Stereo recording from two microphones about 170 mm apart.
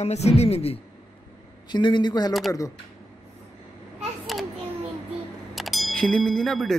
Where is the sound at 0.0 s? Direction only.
40° left (ahead or behind).